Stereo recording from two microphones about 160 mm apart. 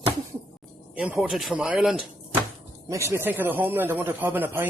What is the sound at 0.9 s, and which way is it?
Speech, 10° right (ahead or behind).